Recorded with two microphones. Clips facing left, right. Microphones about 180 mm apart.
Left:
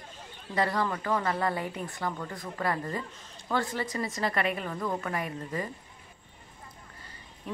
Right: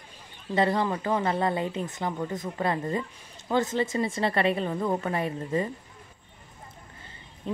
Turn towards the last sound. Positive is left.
turn(degrees=-25)  # may be behind; listen again after turning